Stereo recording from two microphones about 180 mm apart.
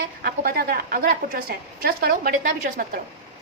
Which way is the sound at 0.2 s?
55° right (ahead or behind).